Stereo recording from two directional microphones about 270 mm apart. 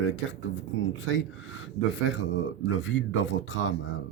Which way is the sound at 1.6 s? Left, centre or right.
Left.